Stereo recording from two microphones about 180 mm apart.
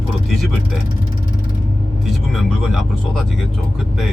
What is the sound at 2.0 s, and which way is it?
Speech, centre (ahead or behind).